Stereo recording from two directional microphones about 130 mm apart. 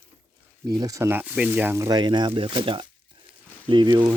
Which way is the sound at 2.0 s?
35° right (ahead or behind).